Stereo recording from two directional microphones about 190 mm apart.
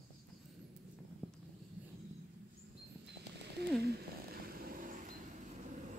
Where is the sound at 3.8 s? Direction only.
55° right (ahead or behind).